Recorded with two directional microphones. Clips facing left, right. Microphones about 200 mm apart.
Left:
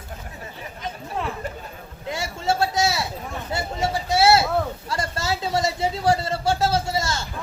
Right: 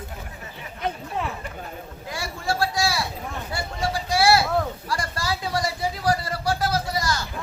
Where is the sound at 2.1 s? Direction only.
25° left (ahead or behind).